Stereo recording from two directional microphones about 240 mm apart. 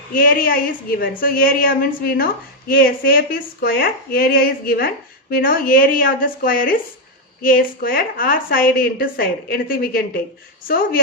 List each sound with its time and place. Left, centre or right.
0.1 s a woman's voice: left